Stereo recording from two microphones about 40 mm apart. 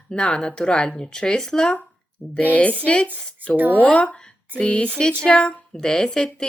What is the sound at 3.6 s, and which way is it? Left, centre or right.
Speech, right.